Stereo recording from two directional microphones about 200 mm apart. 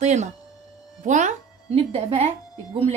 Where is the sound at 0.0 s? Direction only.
35° right (ahead or behind).